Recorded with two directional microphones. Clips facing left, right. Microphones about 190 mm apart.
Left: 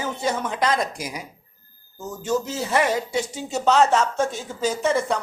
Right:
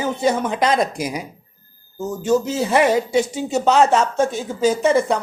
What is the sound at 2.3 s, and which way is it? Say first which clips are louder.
A man's voice: right 6 dB; 15° right (ahead or behind).